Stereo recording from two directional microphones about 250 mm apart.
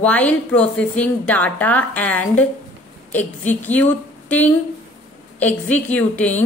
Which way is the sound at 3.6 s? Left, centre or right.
Centre.